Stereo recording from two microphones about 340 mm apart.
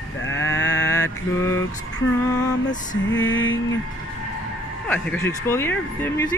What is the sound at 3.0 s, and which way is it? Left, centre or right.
Lullaby, left.